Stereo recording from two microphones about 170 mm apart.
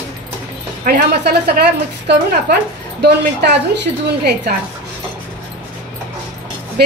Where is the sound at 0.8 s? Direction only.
70° right (ahead or behind).